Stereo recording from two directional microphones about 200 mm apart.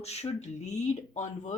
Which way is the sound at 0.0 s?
30° left (ahead or behind).